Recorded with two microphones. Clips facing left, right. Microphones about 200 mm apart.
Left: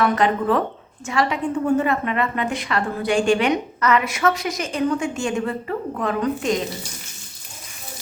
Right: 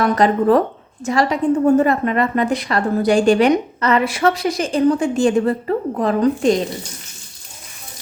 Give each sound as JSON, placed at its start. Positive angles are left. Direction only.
{"t": 0.0, "sound": "a woman's voice", "side_deg": -40}